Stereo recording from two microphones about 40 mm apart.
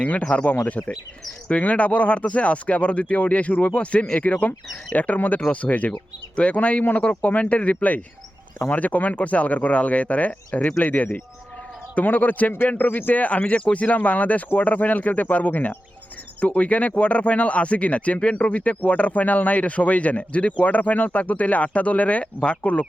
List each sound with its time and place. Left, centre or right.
0.0 s speech: left
5.9 s speech: left
13.2 s speech: left
19.2 s speech: left